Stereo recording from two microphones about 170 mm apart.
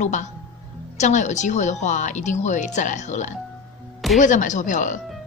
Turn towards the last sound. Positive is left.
turn(degrees=45)  # may be behind; listen again after turning